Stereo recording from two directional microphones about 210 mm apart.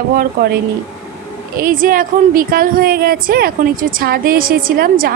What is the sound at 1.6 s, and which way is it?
A woman's voice, 40° right (ahead or behind).